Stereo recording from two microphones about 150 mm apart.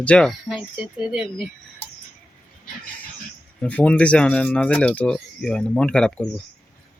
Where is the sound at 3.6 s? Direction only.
10° left (ahead or behind).